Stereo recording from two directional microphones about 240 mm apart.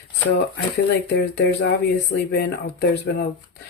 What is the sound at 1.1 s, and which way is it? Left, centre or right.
Speech, left.